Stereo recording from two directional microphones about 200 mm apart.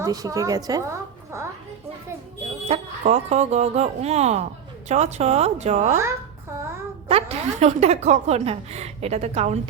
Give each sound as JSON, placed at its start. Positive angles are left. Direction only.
{"t": 0.0, "sound": "a woman's voice", "side_deg": -15}
{"t": 2.6, "sound": "a woman's voice", "side_deg": -35}
{"t": 7.1, "sound": "a woman's voice", "side_deg": -30}